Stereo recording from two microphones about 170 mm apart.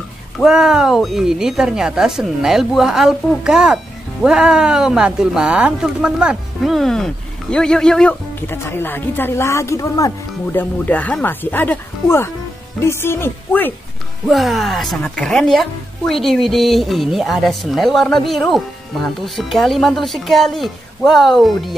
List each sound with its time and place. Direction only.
0.4 s speech: 5° right (ahead or behind)
14.2 s speech: centre (ahead or behind)